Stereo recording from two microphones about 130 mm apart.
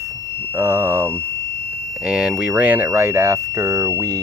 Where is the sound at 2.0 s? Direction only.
5° right (ahead or behind).